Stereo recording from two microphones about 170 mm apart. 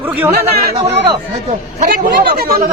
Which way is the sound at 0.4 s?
40° right (ahead or behind).